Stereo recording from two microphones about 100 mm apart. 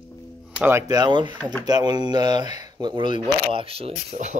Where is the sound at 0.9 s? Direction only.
50° right (ahead or behind).